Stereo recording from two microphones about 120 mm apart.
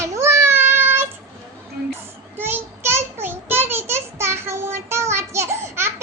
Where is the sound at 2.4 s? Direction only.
20° right (ahead or behind).